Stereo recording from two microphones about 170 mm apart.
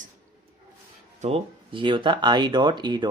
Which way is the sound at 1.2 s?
35° right (ahead or behind).